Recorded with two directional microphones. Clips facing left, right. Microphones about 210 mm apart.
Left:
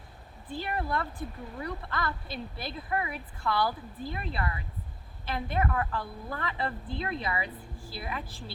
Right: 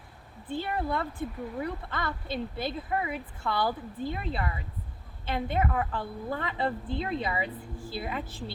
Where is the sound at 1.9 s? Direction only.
25° right (ahead or behind).